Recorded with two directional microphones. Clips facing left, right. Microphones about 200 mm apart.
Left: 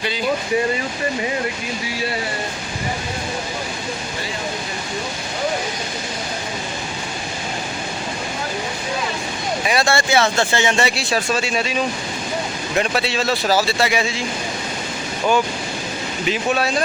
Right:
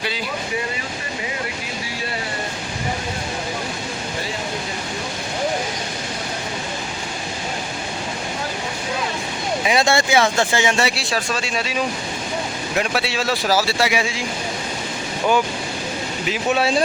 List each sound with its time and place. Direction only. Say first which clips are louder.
9.6 s speech: right 1 dB; 20° right (ahead or behind)
16.6 s speech: right 2 dB; 25° right (ahead or behind)